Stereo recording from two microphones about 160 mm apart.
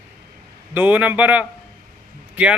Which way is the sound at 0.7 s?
10° right (ahead or behind).